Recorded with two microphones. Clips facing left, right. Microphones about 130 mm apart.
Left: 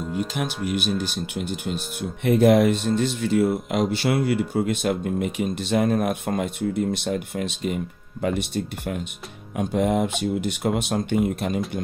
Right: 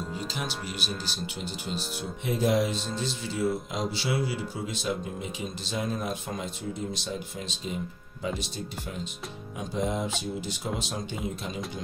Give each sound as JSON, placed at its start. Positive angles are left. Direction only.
{"t": 0.7, "sound": "speech", "side_deg": 55}